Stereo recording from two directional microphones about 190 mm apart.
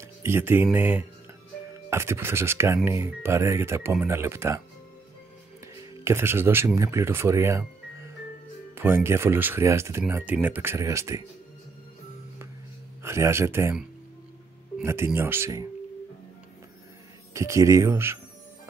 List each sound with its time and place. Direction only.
0.0 s speech: 15° right (ahead or behind)
6.0 s speech: 15° right (ahead or behind)
13.0 s speech: 15° right (ahead or behind)
17.3 s speech: 15° right (ahead or behind)